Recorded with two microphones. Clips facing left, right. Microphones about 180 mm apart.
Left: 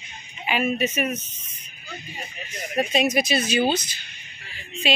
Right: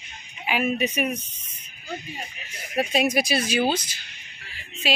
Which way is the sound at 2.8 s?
5° right (ahead or behind).